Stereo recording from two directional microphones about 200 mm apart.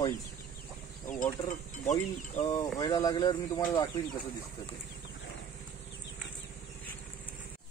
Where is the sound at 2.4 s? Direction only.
15° left (ahead or behind).